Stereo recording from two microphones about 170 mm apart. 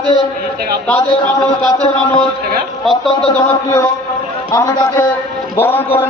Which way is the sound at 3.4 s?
15° left (ahead or behind).